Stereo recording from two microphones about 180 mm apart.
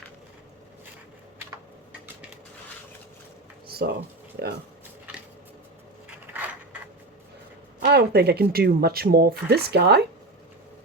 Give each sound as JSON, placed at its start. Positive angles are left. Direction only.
{"t": 3.7, "sound": "a sound", "side_deg": -60}
{"t": 4.4, "sound": "speech", "side_deg": -65}
{"t": 7.9, "sound": "speech", "side_deg": -65}